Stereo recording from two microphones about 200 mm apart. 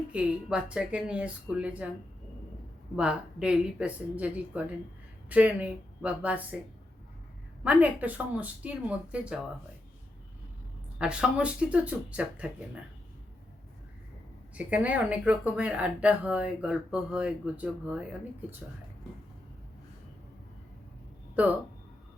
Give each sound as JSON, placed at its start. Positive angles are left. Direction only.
{"t": 0.1, "sound": "a woman's voice", "side_deg": -5}
{"t": 2.9, "sound": "a woman's voice", "side_deg": -5}
{"t": 7.6, "sound": "speech", "side_deg": -5}
{"t": 10.9, "sound": "a woman's voice", "side_deg": -5}
{"t": 14.5, "sound": "a woman's voice", "side_deg": -5}